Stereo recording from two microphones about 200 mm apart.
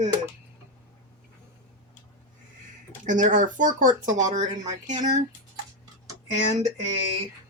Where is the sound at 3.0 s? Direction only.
40° right (ahead or behind).